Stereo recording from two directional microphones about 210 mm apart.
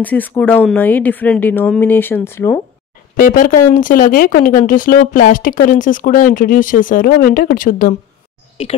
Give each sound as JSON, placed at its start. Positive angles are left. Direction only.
{"t": 0.0, "sound": "speech", "side_deg": 10}
{"t": 3.2, "sound": "speech", "side_deg": 40}
{"t": 8.6, "sound": "speech", "side_deg": 30}